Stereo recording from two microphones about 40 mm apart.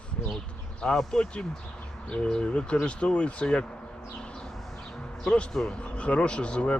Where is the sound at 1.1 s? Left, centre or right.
Left.